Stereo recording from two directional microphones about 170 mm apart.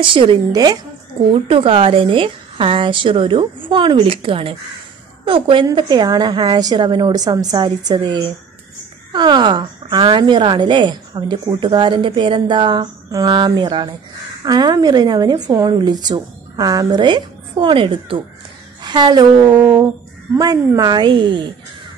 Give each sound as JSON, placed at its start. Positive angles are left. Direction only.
{"t": 0.0, "sound": "a woman's voice", "side_deg": -30}
{"t": 1.3, "sound": "a woman's voice", "side_deg": -35}